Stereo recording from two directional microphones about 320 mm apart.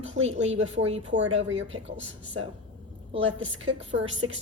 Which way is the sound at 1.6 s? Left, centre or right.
Right.